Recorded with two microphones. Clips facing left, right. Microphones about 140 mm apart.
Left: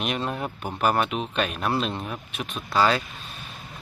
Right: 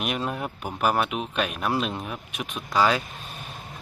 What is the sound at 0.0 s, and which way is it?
Speech, 10° right (ahead or behind).